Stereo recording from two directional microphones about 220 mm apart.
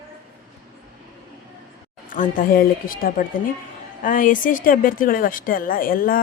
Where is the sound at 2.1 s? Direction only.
40° left (ahead or behind).